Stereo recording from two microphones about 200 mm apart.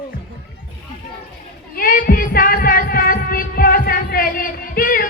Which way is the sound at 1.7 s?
45° left (ahead or behind).